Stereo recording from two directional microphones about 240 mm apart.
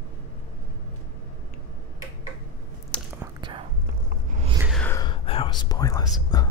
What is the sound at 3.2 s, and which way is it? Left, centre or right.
Whispering, centre.